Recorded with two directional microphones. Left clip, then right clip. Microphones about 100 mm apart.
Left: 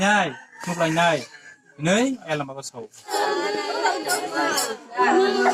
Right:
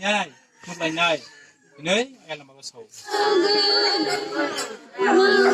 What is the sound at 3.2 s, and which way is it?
Music, 30° right (ahead or behind).